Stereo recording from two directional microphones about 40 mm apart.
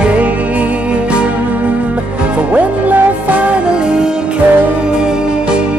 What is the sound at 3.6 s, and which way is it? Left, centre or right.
Music, right.